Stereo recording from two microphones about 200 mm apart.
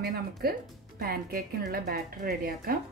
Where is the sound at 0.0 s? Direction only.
50° right (ahead or behind).